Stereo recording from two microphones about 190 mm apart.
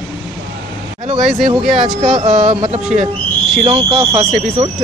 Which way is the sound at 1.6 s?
35° right (ahead or behind).